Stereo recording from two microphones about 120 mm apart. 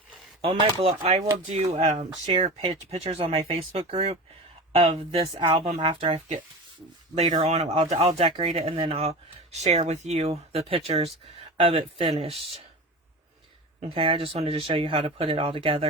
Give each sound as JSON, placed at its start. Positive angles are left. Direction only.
{"t": 0.8, "sound": "speech", "side_deg": -50}
{"t": 2.2, "sound": "speech", "side_deg": -55}
{"t": 7.4, "sound": "speech", "side_deg": -60}
{"t": 13.8, "sound": "speech", "side_deg": -50}